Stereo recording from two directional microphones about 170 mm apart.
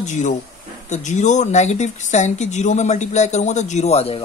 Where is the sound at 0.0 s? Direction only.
45° left (ahead or behind).